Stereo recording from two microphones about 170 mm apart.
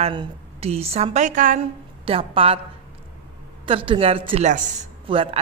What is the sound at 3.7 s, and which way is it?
Speech, 30° right (ahead or behind).